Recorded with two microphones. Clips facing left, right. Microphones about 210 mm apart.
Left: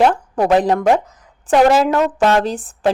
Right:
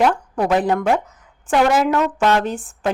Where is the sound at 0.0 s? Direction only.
30° left (ahead or behind).